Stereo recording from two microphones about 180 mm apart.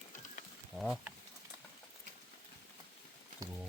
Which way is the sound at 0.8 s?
Centre (ahead or behind).